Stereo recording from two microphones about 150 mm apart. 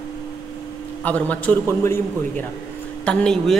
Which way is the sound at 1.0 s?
10° left (ahead or behind).